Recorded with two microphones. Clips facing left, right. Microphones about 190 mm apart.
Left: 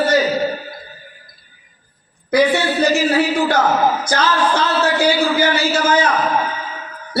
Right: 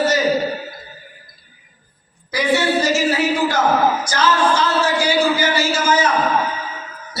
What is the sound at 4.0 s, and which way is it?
A man's voice, 60° left (ahead or behind).